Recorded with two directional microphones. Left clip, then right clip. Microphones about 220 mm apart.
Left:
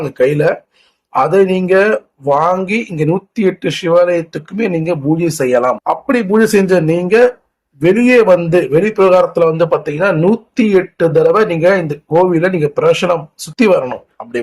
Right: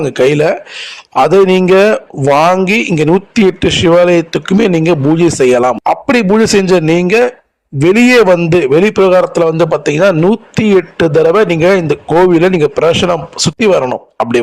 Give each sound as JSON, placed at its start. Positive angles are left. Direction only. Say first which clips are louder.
{"t": 0.0, "sound": "a man's voice", "louder": "right 3 dB", "side_deg": -40}